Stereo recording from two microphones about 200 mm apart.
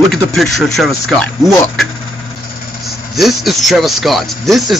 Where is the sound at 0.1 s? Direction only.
Centre (ahead or behind).